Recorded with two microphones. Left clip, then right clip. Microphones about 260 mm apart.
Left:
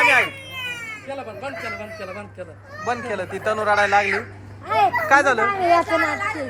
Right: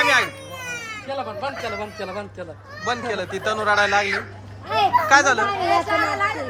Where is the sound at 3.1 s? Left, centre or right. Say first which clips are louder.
Even; centre.